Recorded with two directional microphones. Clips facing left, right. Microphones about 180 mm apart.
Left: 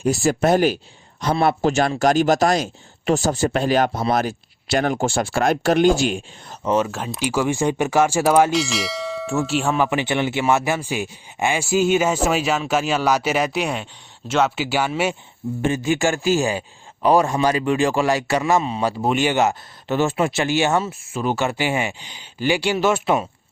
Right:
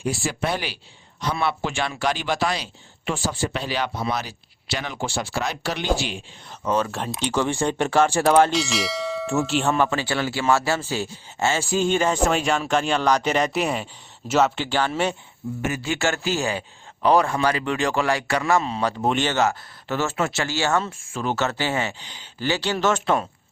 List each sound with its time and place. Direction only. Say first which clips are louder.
0.0 s speech: left 7 dB; 45° left (ahead or behind)
6.8 s speech: left 2 dB; centre (ahead or behind)
8.3 s bell: left 1 dB; 5° left (ahead or behind)
9.9 s speech: left 4 dB; 20° left (ahead or behind); by 13.8 s centre (ahead or behind)
14.3 s bell: even; 5° right (ahead or behind)
14.5 s speech: left 2 dB; 10° left (ahead or behind)
15.4 s speech: left 4 dB; 25° left (ahead or behind)
15.8 s speech: left 5 dB; 15° left (ahead or behind)